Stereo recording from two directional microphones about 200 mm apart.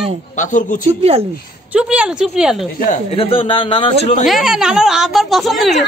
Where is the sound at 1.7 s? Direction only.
5° right (ahead or behind).